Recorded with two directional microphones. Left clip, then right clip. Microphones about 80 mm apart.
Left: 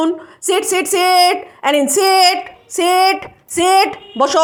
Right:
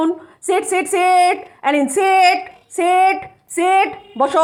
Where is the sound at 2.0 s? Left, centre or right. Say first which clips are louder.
Left 1 dB; left.